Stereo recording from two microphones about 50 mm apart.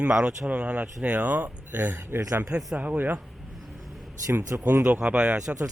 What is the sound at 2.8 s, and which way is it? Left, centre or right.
Speech, right.